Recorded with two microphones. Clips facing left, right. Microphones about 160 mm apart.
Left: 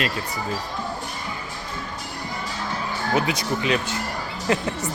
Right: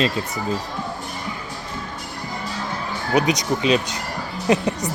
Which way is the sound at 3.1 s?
20° right (ahead or behind).